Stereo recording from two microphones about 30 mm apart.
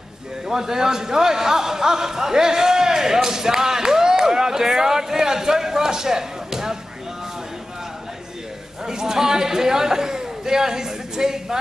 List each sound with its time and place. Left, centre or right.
0.5 s a man's voice: centre
8.8 s a man's voice: centre